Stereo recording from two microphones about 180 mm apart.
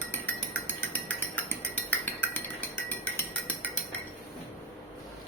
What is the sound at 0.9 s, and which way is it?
Cutlery, 10° left (ahead or behind).